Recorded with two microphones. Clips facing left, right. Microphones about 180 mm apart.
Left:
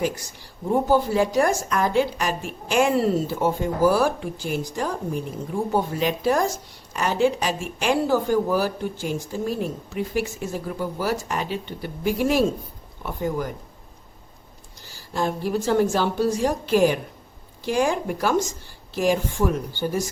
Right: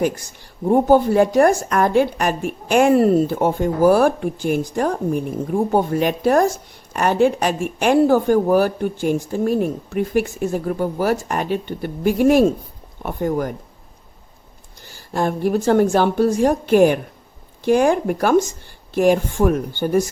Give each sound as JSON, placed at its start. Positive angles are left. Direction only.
{"t": 0.7, "sound": "a woman's voice", "side_deg": -55}
{"t": 14.9, "sound": "a woman's voice", "side_deg": -55}